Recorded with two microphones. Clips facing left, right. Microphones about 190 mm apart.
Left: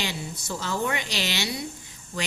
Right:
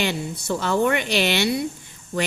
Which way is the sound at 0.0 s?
60° right (ahead or behind).